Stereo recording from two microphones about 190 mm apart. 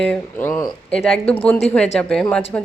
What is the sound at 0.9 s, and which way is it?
Speech, 5° left (ahead or behind).